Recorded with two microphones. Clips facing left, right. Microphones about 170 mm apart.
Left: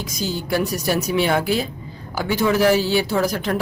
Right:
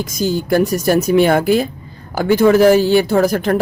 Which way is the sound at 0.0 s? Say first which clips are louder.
Right 8 dB; 50° right (ahead or behind).